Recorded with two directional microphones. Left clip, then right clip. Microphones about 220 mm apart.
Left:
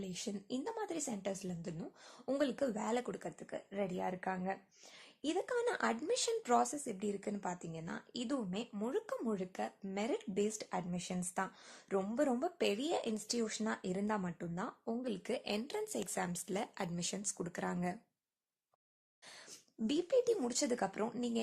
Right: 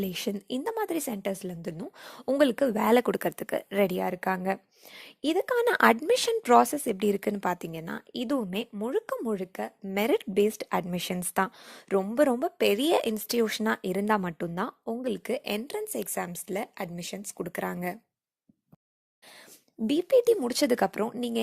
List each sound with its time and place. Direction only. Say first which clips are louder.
0.0 s a woman's voice: right 12 dB; 40° right (ahead or behind)
19.9 s a woman's voice: right 11 dB; 30° right (ahead or behind)